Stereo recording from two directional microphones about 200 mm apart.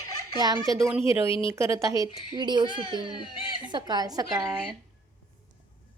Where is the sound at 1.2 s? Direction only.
25° left (ahead or behind).